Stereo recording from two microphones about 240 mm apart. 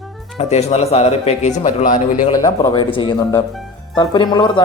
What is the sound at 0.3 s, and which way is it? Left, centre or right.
A man's voice, left.